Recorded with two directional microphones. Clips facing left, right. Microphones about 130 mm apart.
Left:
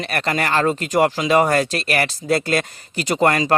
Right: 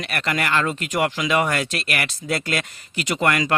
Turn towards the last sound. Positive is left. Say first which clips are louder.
# left 4 dB
turn(degrees=35)  # may be behind; listen again after turning